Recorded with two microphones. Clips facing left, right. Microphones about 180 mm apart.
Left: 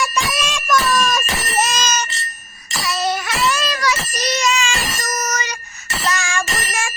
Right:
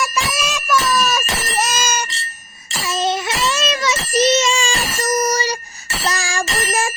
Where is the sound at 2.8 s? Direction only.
25° right (ahead or behind).